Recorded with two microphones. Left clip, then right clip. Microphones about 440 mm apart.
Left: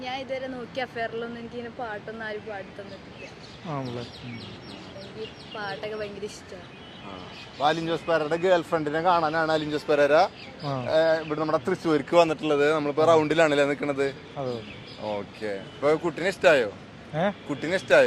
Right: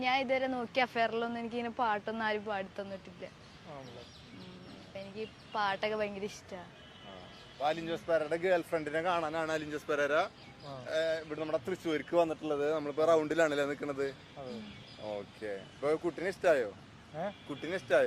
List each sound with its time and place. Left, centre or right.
0.0 s speech: right
5.5 s a woman's voice: right
7.6 s a man's voice: left
14.4 s a man's voice: left
15.1 s a man's voice: left